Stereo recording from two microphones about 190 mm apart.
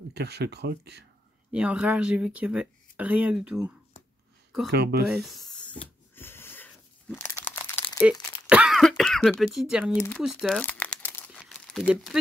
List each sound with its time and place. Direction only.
0.1 s speech: 60° right (ahead or behind)
1.5 s speech: 5° right (ahead or behind)
4.6 s speech: 60° right (ahead or behind)
5.0 s speech: centre (ahead or behind)
5.5 s a sound: 5° left (ahead or behind)
6.1 s wheeze: 10° left (ahead or behind)
7.3 s crumpling: 10° left (ahead or behind)
8.0 s speech: 5° right (ahead or behind)
10.6 s crumpling: 10° left (ahead or behind)
11.9 s speech: centre (ahead or behind)